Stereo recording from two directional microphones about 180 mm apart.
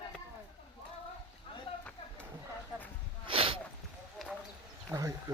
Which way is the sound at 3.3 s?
30° right (ahead or behind).